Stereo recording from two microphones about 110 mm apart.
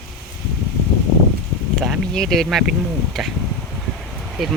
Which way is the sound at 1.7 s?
Centre (ahead or behind).